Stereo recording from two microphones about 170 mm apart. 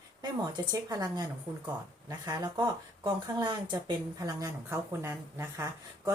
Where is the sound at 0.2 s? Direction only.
25° right (ahead or behind).